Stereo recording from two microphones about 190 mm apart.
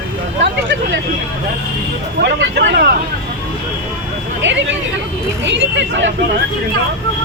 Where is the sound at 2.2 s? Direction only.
65° right (ahead or behind).